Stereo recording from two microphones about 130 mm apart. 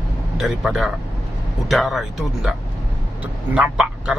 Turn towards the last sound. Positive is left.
turn(degrees=-5)  # may be behind; listen again after turning